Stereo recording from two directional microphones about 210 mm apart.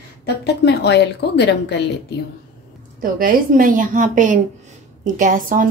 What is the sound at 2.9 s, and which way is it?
A woman's voice, 40° right (ahead or behind).